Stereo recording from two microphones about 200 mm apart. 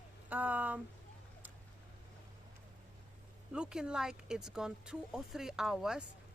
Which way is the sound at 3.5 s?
5° right (ahead or behind).